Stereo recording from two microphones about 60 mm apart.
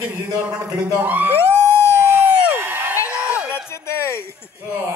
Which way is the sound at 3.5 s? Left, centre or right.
Left.